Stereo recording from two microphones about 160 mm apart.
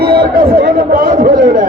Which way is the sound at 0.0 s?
75° right (ahead or behind).